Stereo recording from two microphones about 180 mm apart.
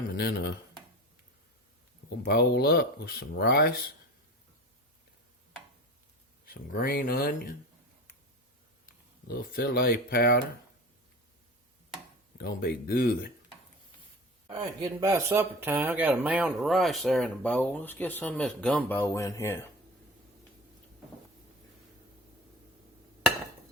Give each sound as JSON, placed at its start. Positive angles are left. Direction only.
{"t": 0.1, "sound": "speech", "side_deg": 60}
{"t": 2.2, "sound": "speech", "side_deg": 60}
{"t": 6.4, "sound": "speech", "side_deg": 55}
{"t": 9.2, "sound": "speech", "side_deg": 55}
{"t": 12.4, "sound": "speech", "side_deg": 60}
{"t": 14.4, "sound": "speech", "side_deg": -20}